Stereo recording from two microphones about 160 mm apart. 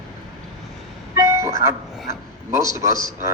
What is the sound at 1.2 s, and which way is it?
Train, 15° right (ahead or behind).